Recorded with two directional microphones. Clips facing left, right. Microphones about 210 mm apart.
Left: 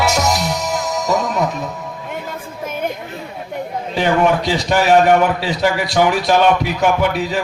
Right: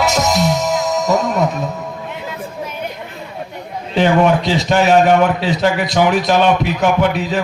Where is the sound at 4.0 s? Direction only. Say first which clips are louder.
Right 3 dB; 20° right (ahead or behind).